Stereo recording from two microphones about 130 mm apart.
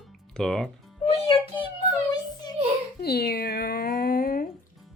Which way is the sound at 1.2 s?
40° left (ahead or behind).